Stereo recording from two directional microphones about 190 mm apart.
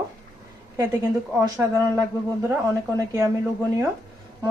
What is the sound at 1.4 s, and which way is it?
A woman's voice, 15° right (ahead or behind).